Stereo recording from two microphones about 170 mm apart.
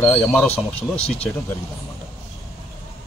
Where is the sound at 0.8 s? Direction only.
35° left (ahead or behind).